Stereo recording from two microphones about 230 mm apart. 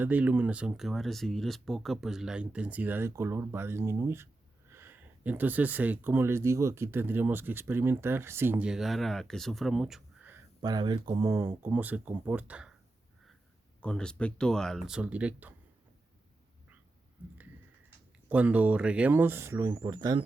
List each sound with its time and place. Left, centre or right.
0.0 s speech: centre
13.8 s speech: centre
18.3 s speech: centre